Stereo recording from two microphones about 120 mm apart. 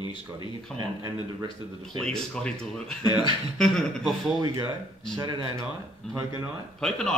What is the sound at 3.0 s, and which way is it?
Speech, 35° left (ahead or behind).